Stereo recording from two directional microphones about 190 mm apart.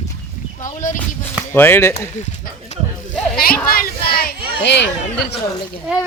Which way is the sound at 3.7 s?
50° left (ahead or behind).